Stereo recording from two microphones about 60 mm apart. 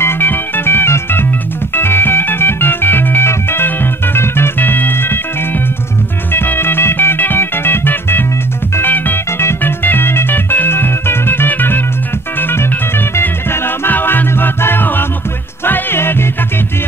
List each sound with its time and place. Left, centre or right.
0.0 s organ: left
1.8 s music: left